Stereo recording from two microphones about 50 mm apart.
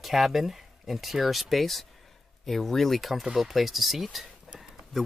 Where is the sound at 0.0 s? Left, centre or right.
Centre.